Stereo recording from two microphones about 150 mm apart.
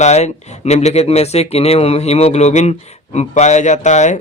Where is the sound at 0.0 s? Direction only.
45° left (ahead or behind).